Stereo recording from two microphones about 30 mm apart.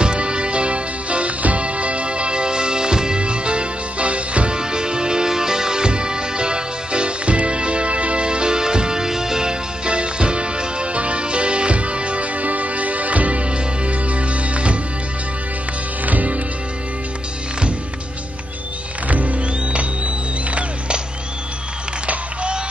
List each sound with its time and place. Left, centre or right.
0.0 s music: right
4.6 s music: right
9.8 s music: right
16.1 s music: right
19.0 s music: right
22.0 s a sound: right